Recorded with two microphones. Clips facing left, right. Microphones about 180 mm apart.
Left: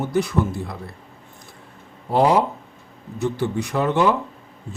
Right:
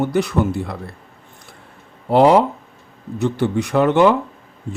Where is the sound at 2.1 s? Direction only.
75° right (ahead or behind).